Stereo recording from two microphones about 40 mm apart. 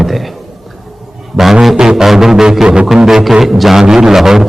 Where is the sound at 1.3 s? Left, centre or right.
Centre.